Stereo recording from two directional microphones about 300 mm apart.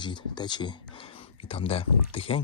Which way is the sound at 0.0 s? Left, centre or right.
Centre.